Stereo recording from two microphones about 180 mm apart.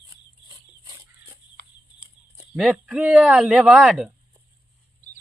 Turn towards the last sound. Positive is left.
turn(degrees=0)  # may be behind; listen again after turning